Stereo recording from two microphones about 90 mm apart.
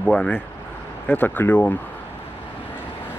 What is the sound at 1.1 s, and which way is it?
Speech, 20° left (ahead or behind).